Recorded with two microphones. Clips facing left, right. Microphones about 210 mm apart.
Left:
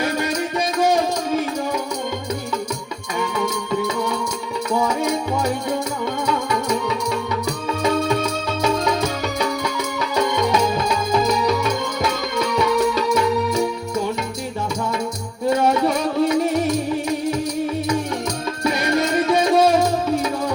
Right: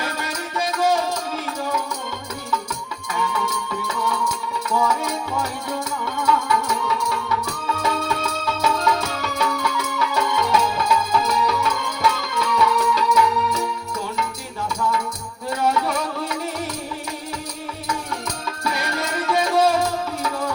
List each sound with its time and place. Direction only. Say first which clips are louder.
0.8 s music: left 3 dB; 15° left (ahead or behind)
3.2 s music: left 3 dB; 20° left (ahead or behind)
14.8 s music: left 1 dB; 25° left (ahead or behind)
18.6 s music: left 7 dB; 20° left (ahead or behind)